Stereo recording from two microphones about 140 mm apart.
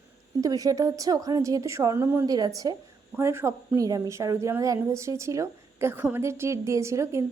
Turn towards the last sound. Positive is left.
turn(degrees=-20)  # may be behind; listen again after turning